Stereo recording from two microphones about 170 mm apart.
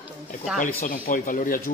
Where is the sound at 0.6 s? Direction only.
55° left (ahead or behind).